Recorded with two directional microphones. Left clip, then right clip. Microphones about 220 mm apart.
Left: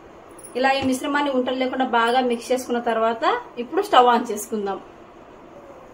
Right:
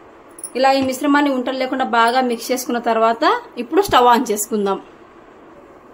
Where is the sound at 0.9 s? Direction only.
45° right (ahead or behind).